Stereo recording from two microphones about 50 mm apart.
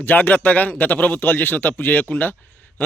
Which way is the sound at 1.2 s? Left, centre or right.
Left.